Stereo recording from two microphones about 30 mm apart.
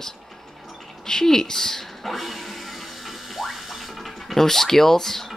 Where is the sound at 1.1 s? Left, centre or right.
Centre.